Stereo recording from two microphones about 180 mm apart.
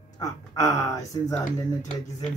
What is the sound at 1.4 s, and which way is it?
Speech, 45° left (ahead or behind).